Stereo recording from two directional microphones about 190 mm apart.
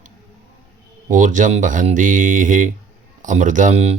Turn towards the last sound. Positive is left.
turn(degrees=-35)  # may be behind; listen again after turning